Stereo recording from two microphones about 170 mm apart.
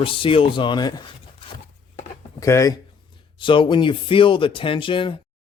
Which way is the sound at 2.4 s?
20° left (ahead or behind).